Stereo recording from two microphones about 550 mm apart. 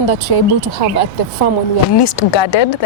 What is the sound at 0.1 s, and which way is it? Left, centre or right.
Speech, left.